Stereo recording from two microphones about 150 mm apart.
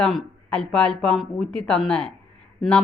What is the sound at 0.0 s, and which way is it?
A woman's voice, 5° left (ahead or behind).